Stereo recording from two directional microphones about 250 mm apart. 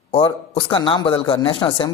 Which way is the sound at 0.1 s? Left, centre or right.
Left.